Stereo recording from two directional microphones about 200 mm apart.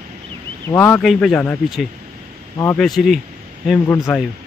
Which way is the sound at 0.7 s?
10° left (ahead or behind).